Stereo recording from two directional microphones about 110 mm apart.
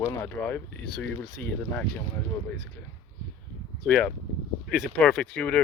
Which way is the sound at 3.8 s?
10° left (ahead or behind).